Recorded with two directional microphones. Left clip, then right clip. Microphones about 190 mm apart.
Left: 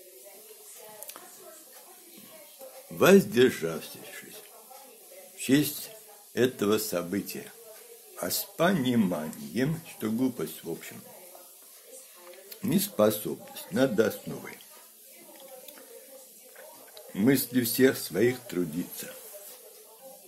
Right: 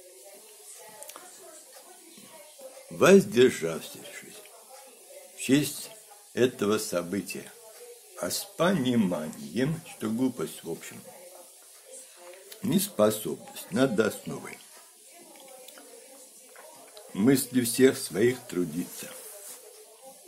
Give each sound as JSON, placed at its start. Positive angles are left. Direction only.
{"t": 3.0, "sound": "speech", "side_deg": 0}
{"t": 12.4, "sound": "speech", "side_deg": 0}
{"t": 16.9, "sound": "speech", "side_deg": 0}